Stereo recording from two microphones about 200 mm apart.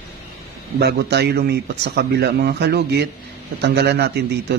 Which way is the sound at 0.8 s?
55° right (ahead or behind).